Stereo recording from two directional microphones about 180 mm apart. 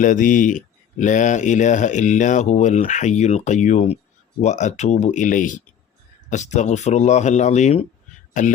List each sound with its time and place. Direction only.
0.0 s speech: 45° left (ahead or behind)